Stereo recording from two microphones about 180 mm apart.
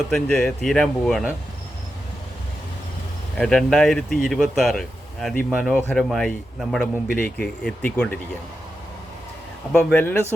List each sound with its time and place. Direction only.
0.1 s a man's voice: 5° left (ahead or behind)
3.3 s a man's voice: 5° left (ahead or behind)
9.7 s speech: 10° left (ahead or behind)